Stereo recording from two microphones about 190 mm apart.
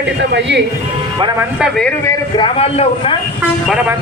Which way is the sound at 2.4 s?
30° left (ahead or behind).